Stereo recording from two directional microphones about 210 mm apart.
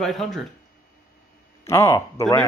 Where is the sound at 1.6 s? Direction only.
15° left (ahead or behind).